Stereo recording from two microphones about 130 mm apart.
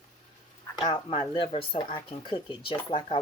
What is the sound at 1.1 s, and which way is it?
Speech, 45° left (ahead or behind).